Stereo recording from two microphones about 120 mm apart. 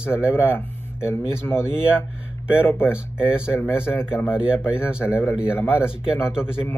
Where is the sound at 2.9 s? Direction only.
10° right (ahead or behind).